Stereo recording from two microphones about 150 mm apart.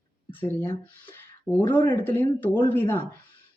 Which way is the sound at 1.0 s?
15° left (ahead or behind).